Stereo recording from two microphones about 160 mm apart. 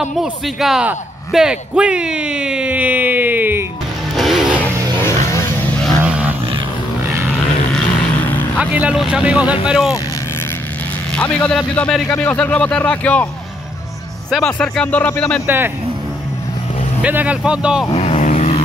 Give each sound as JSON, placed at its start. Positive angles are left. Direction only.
{"t": 0.0, "sound": "speech", "side_deg": -5}
{"t": 4.2, "sound": "vehicle", "side_deg": 0}
{"t": 5.9, "sound": "vehicle", "side_deg": -5}
{"t": 7.7, "sound": "vehicle", "side_deg": 10}
{"t": 8.5, "sound": "speech", "side_deg": -10}
{"t": 11.1, "sound": "a man's voice", "side_deg": 5}
{"t": 14.3, "sound": "a man's voice", "side_deg": 5}
{"t": 15.4, "sound": "speech", "side_deg": -15}
{"t": 17.0, "sound": "speech", "side_deg": -10}
{"t": 17.9, "sound": "vehicle", "side_deg": 40}